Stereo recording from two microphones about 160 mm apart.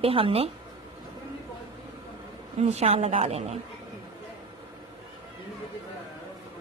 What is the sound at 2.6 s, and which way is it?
A woman's voice, 40° right (ahead or behind).